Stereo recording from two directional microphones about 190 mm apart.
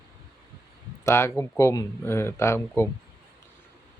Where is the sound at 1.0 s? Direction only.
15° left (ahead or behind).